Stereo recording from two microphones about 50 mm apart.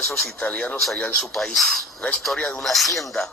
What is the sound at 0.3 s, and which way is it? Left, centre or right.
Speech, left.